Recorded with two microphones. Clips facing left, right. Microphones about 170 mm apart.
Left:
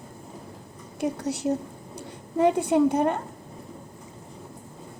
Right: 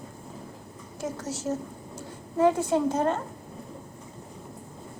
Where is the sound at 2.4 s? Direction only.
15° left (ahead or behind).